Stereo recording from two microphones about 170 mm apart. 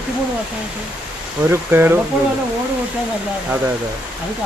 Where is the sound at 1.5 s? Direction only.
15° right (ahead or behind).